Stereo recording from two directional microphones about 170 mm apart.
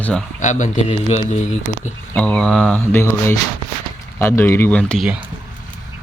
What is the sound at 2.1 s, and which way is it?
Speech, 5° left (ahead or behind).